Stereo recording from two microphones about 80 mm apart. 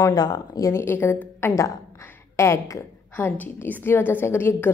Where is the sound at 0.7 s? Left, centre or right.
Left.